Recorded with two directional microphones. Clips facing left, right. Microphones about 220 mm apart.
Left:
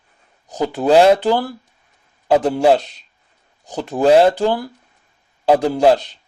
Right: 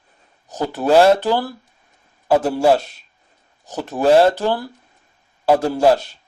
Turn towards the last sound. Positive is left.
turn(degrees=15)  # may be behind; listen again after turning